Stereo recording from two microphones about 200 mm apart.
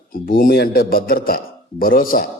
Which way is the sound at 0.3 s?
45° left (ahead or behind).